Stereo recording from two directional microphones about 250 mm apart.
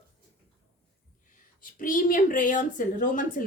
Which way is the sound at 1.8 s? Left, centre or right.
Left.